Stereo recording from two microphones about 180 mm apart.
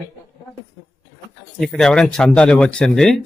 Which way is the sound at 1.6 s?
5° left (ahead or behind).